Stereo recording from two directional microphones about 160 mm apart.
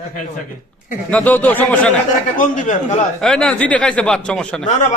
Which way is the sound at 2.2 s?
55° left (ahead or behind).